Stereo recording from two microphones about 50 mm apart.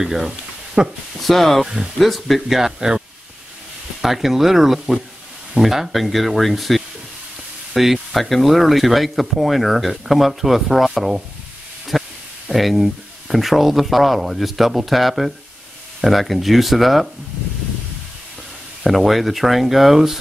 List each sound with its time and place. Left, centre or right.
0.0 s speech: centre
0.8 s speech: centre
1.2 s speech: centre
4.0 s speech: centre
11.9 s a sound: centre
12.4 s speech: centre
18.9 s speech: centre